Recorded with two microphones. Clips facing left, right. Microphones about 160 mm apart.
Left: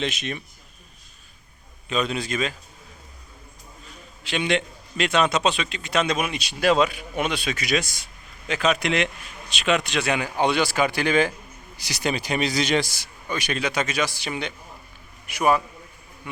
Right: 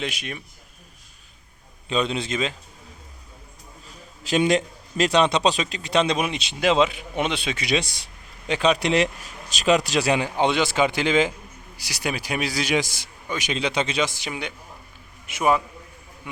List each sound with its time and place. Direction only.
0.0 s speech: 10° right (ahead or behind)
1.9 s a man's voice: 25° right (ahead or behind)
4.2 s a man's voice: 40° right (ahead or behind); by 11.3 s 20° right (ahead or behind)
11.8 s a man's voice: 5° right (ahead or behind)